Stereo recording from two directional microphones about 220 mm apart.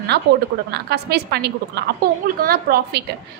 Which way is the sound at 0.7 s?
45° right (ahead or behind).